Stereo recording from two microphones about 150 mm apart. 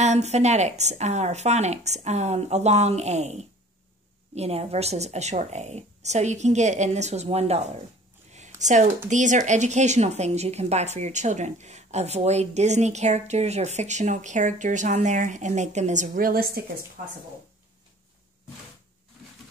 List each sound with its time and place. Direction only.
0.0 s speech: 45° right (ahead or behind); by 16.6 s 80° right
17.0 s speech: 60° right (ahead or behind)